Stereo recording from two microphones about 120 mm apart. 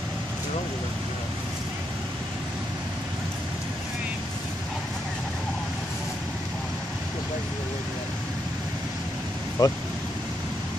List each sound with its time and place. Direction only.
9.6 s speech: 30° left (ahead or behind)